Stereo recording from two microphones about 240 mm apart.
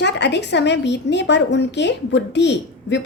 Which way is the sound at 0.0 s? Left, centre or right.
Left.